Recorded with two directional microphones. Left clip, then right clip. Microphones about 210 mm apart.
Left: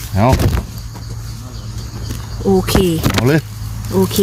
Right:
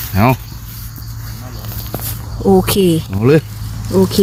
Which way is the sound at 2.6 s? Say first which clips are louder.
Right 2 dB; 25° right (ahead or behind).